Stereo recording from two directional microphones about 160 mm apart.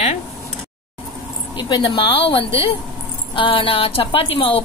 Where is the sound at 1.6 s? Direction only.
30° left (ahead or behind).